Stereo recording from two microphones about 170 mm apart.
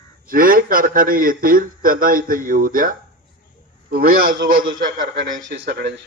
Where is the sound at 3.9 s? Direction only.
55° right (ahead or behind).